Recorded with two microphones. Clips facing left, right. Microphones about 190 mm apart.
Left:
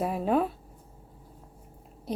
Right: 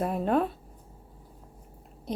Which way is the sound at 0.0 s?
5° left (ahead or behind).